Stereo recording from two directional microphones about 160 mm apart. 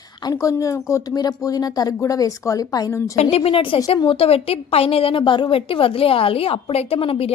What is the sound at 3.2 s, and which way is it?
A woman's voice, 40° left (ahead or behind).